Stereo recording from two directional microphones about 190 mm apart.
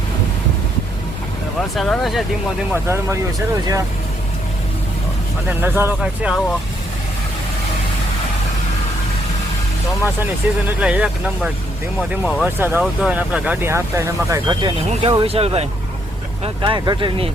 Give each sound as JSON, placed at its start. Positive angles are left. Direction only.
{"t": 1.7, "sound": "speech", "side_deg": 0}
{"t": 2.8, "sound": "speech", "side_deg": -15}
{"t": 5.5, "sound": "speech", "side_deg": -10}
{"t": 10.4, "sound": "speech", "side_deg": -10}
{"t": 12.5, "sound": "speech", "side_deg": -10}